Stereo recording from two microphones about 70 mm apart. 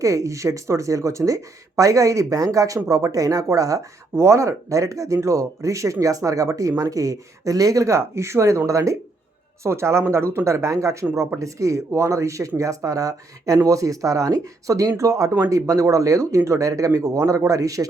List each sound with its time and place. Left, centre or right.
0.0 s speech: right